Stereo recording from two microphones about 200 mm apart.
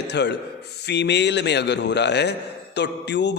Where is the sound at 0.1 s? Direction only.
60° left (ahead or behind).